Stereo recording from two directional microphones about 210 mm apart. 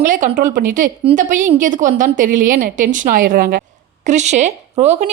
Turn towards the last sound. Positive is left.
turn(degrees=-35)  # may be behind; listen again after turning